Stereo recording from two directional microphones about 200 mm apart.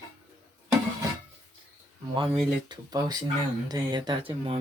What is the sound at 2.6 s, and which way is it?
Speech, 20° right (ahead or behind).